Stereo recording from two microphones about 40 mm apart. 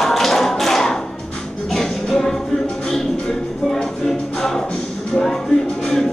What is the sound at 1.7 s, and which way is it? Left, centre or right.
Music, centre.